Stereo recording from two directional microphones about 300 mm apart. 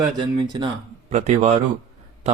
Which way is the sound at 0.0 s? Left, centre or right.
Centre.